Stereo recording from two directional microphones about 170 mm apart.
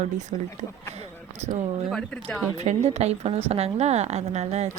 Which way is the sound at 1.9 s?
5° left (ahead or behind).